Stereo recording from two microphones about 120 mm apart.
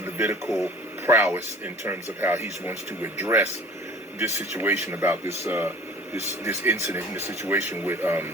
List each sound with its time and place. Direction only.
0.0 s radio: 20° right (ahead or behind)
0.5 s speech: 25° right (ahead or behind)